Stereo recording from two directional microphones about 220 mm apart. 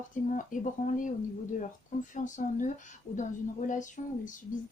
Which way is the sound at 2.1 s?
35° left (ahead or behind).